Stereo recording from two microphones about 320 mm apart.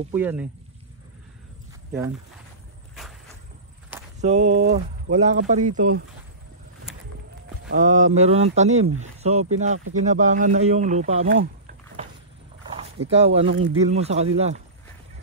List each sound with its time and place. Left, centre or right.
0.1 s speech: centre
1.9 s speech: centre
3.0 s a sound: centre
4.2 s speech: right
7.6 s speech: right
13.1 s speech: centre